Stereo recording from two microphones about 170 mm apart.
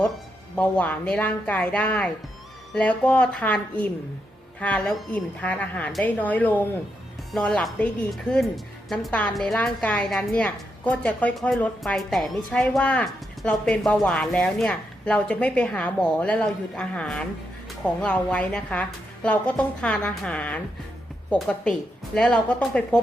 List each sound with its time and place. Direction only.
0.5 s a woman's voice: 10° left (ahead or behind)